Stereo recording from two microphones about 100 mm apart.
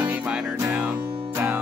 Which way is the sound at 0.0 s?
15° right (ahead or behind).